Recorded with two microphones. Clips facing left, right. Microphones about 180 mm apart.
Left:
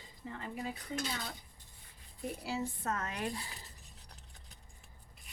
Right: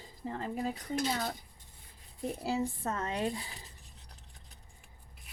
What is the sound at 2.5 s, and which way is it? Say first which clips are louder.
Speech: right 3 dB; 30° right (ahead or behind).